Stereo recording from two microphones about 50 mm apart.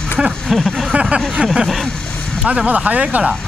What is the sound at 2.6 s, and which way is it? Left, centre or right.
Speech, right.